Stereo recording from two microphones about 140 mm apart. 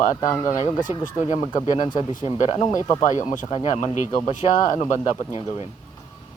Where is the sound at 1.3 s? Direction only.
60° left (ahead or behind).